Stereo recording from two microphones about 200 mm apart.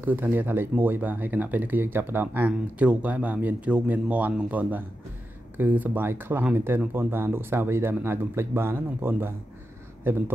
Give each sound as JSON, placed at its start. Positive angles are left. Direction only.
{"t": 0.0, "sound": "speech", "side_deg": -10}